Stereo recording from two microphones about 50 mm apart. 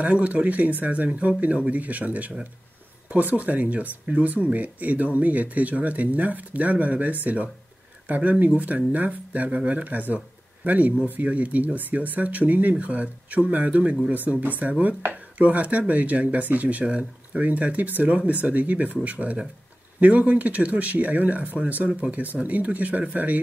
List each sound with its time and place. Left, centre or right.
0.0 s speech: right
10.1 s a sound: right
11.1 s speech: right